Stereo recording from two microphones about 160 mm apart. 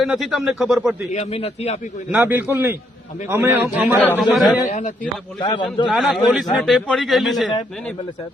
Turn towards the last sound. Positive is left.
turn(degrees=0)  # may be behind; listen again after turning